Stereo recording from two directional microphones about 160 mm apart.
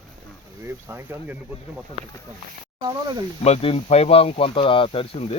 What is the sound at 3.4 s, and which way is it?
Speech, 40° left (ahead or behind).